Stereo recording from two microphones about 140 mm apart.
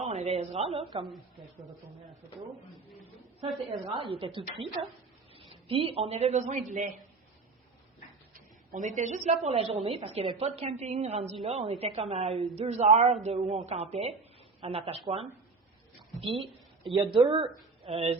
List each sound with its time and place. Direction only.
0.0 s a woman's voice: 50° right (ahead or behind)
3.4 s a woman's voice: centre (ahead or behind)
3.9 s a woman's voice: 40° right (ahead or behind); by 6.8 s 65° right (ahead or behind)
8.3 s a woman's voice: 70° right (ahead or behind); by 15.3 s 45° right (ahead or behind)
16.4 s a woman's voice: 35° right (ahead or behind)